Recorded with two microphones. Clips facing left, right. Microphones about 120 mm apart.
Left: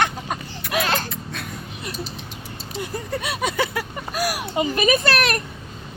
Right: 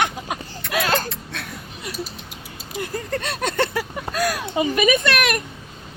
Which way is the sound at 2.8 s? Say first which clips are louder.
Right 1 dB; 15° left (ahead or behind).